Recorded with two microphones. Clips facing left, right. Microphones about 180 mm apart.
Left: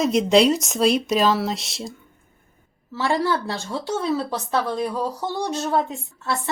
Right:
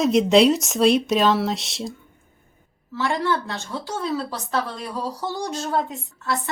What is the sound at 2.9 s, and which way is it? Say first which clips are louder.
A woman's voice: left 1 dB; 30° left (ahead or behind).